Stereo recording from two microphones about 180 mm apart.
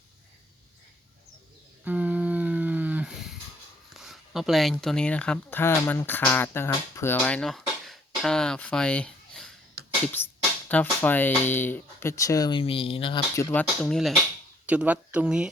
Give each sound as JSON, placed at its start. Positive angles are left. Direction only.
{"t": 1.8, "sound": "a sound", "side_deg": -10}
{"t": 3.9, "sound": "speech", "side_deg": 0}
{"t": 10.7, "sound": "speech", "side_deg": 10}
{"t": 13.3, "sound": "speech", "side_deg": 10}
{"t": 14.7, "sound": "speech", "side_deg": -5}